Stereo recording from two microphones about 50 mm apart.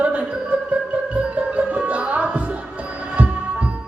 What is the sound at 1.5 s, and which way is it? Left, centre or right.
Music, right.